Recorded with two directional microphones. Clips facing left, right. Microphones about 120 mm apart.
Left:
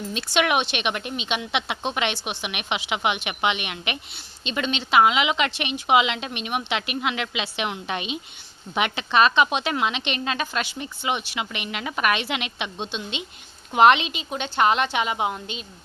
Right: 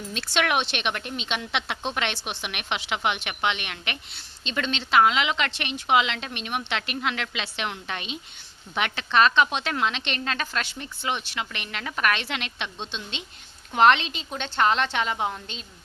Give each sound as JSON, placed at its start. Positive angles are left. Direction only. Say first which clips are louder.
{"t": 0.1, "sound": "a woman's voice", "louder": "left 3 dB", "side_deg": 10}